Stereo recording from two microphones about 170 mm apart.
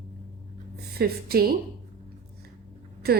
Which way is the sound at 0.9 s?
65° right (ahead or behind).